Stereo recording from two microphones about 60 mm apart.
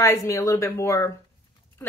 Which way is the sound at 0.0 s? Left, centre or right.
Left.